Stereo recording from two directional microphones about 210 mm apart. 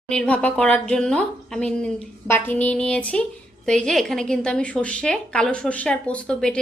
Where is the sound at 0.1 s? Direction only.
5° left (ahead or behind).